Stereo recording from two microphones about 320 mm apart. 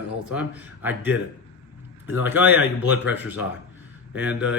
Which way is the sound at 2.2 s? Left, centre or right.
Centre.